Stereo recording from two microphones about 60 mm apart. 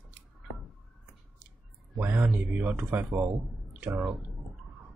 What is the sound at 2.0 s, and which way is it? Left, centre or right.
Speech, right.